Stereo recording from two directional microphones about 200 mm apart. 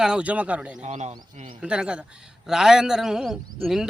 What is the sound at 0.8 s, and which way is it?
Speech, 35° right (ahead or behind).